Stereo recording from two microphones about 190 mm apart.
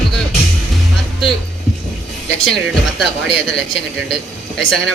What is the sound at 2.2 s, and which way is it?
Speech, 5° left (ahead or behind).